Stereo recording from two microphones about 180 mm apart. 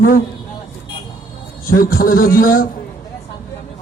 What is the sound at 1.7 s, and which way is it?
Speech, 55° left (ahead or behind).